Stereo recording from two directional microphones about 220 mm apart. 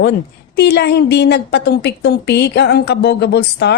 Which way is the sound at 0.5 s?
50° left (ahead or behind).